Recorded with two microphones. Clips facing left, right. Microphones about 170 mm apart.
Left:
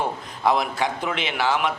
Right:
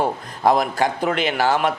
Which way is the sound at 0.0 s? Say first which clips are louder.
Right 4 dB; 40° right (ahead or behind).